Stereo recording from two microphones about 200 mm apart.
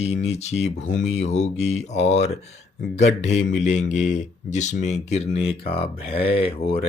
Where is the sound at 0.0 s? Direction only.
30° left (ahead or behind).